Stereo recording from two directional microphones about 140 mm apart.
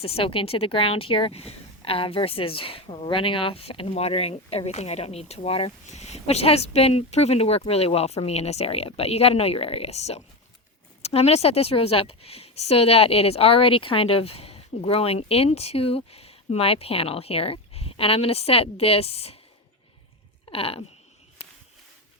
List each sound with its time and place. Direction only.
0.0 s speech: 40° left (ahead or behind)
20.4 s speech: 45° left (ahead or behind)